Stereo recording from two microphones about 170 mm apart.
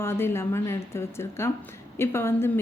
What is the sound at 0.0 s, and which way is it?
A woman's voice, 15° left (ahead or behind).